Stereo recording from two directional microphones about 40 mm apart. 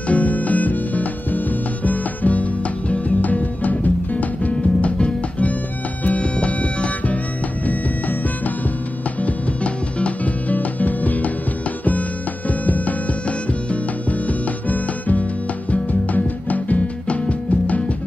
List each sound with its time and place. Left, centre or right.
0.1 s music: left
7.6 s music: left
9.2 s music: left
12.4 s music: left